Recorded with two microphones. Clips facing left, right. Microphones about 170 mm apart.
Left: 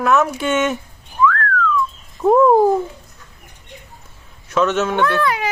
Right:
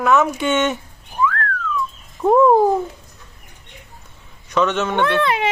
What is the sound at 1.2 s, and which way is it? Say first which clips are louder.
Whistling: left 3 dB; 30° right (ahead or behind).